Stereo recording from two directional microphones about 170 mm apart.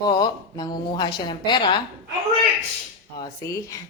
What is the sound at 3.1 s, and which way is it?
Speech, 20° left (ahead or behind).